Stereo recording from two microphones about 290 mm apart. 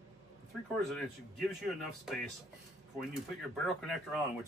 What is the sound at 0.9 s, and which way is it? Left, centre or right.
Speech, centre.